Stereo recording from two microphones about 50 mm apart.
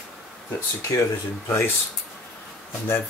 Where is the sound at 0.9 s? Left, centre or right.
Left.